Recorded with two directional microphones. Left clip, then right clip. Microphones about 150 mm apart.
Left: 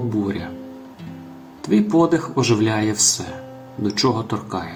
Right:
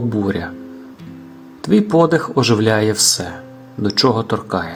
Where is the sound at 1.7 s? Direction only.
60° right (ahead or behind).